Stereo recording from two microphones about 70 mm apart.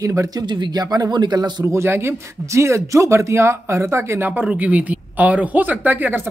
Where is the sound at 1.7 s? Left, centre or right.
Right.